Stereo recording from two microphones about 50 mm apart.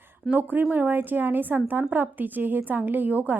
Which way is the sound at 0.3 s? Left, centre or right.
Right.